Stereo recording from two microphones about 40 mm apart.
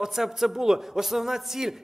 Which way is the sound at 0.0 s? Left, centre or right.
Centre.